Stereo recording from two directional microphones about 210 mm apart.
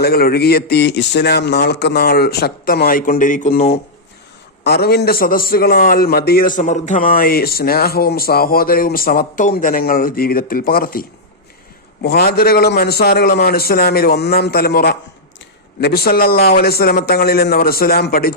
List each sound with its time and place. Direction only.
0.0 s a man's voice: 45° left (ahead or behind)
12.0 s a man's voice: 50° left (ahead or behind)